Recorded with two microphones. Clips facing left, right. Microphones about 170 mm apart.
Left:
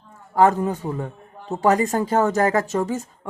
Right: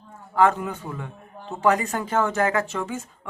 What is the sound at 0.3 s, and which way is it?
A man's voice, 35° left (ahead or behind).